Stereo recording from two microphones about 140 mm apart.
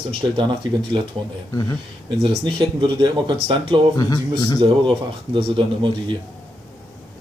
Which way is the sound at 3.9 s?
25° left (ahead or behind).